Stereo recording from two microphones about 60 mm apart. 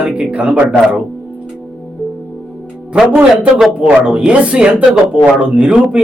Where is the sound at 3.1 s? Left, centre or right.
Right.